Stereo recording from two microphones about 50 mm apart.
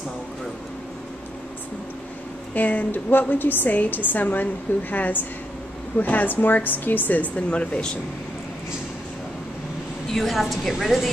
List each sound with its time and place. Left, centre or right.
2.5 s a woman's voice: left
7.4 s speech: left
10.0 s a woman's voice: centre